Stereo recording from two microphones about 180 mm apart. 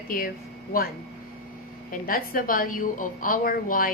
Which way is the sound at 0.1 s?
50° left (ahead or behind).